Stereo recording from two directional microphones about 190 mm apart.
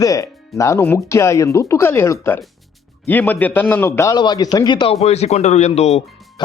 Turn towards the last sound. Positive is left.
turn(degrees=35)  # may be behind; listen again after turning